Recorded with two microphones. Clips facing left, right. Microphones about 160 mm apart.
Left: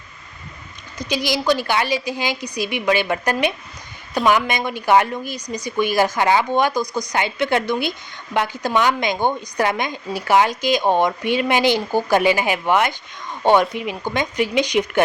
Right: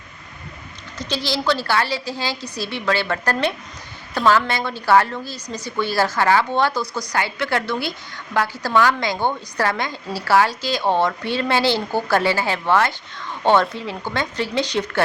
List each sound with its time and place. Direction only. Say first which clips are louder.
0.9 s a woman's voice: left 2 dB; 15° left (ahead or behind)